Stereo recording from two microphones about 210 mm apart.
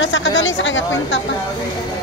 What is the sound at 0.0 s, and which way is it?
Speech, 60° left (ahead or behind).